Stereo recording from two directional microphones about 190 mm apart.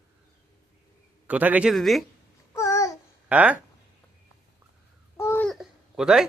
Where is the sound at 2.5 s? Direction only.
15° left (ahead or behind).